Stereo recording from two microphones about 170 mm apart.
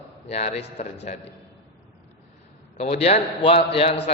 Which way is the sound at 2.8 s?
40° left (ahead or behind).